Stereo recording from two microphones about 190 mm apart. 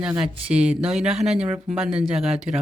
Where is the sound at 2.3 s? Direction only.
35° right (ahead or behind).